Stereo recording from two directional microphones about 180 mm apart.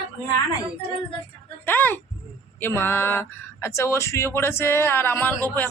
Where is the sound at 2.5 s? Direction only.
10° left (ahead or behind).